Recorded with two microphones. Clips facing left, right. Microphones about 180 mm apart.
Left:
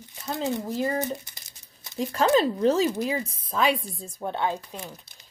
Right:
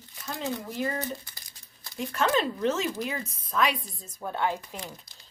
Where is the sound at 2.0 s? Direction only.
35° left (ahead or behind).